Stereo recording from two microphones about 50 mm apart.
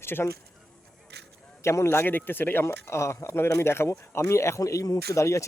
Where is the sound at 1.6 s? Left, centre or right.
Left.